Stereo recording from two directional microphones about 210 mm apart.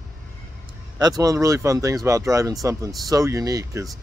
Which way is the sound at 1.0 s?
15° right (ahead or behind).